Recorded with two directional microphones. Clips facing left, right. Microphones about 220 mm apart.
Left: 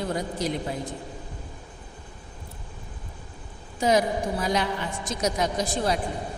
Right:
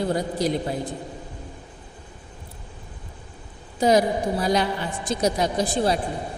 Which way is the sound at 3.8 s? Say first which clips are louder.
Right 4 dB; 35° right (ahead or behind).